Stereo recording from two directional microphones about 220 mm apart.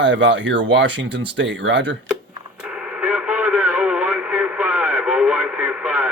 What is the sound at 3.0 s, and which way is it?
Radio, 5° right (ahead or behind).